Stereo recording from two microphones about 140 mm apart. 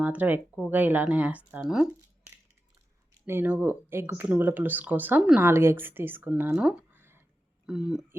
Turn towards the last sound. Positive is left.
turn(degrees=-5)  # may be behind; listen again after turning